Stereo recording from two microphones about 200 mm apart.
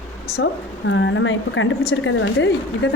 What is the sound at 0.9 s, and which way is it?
A woman's voice, 70° left (ahead or behind).